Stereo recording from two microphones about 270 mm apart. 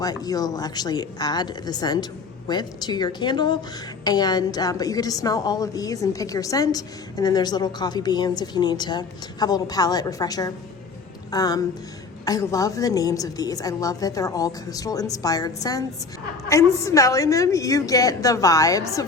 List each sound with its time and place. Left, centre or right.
0.0 s a woman's voice: centre